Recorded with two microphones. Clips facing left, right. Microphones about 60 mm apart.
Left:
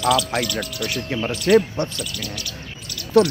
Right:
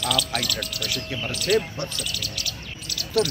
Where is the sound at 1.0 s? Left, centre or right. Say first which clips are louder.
Left 6 dB; left.